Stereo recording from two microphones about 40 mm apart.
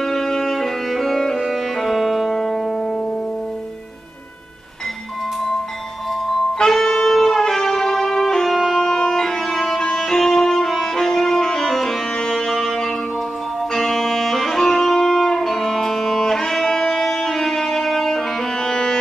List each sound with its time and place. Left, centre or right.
0.0 s music: centre
6.2 s music: centre
8.7 s music: centre
9.9 s saxophone: centre
12.2 s music: centre